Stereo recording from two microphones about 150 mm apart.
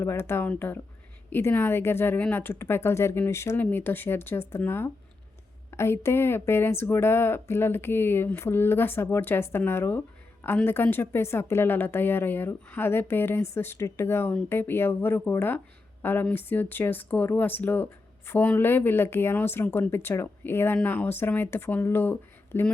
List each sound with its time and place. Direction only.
0.0 s a woman's voice: 15° left (ahead or behind)